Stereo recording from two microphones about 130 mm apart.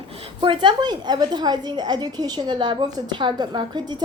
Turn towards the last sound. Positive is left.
turn(degrees=-35)  # may be behind; listen again after turning